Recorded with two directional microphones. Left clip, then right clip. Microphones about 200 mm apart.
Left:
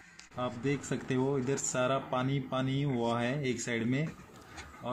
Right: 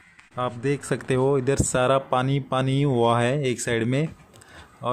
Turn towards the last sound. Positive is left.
turn(degrees=-55)  # may be behind; listen again after turning